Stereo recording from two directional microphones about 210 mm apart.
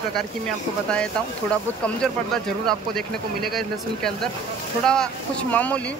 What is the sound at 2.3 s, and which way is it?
Speech, centre (ahead or behind).